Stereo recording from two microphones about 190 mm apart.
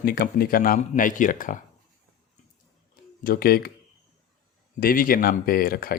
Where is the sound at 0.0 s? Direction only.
50° left (ahead or behind).